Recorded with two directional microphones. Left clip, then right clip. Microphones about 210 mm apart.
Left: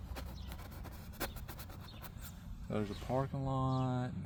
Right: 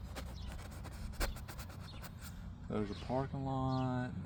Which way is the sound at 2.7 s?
45° left (ahead or behind).